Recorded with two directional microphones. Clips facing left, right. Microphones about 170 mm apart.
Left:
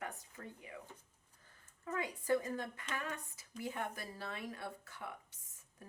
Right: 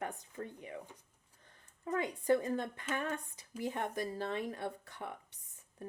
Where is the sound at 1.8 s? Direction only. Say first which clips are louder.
Right 5 dB; 25° right (ahead or behind).